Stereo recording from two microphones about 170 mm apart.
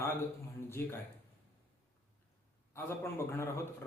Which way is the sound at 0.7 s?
15° left (ahead or behind).